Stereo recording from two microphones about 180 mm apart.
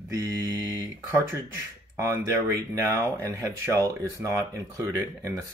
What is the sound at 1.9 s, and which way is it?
Speech, 15° right (ahead or behind).